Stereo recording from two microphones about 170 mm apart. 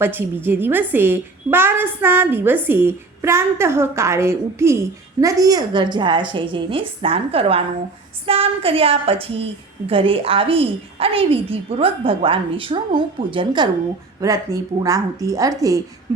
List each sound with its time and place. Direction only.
0.0 s a woman's voice: 10° right (ahead or behind)